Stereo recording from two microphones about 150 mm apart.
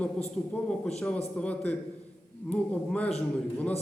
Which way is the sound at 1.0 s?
5° left (ahead or behind).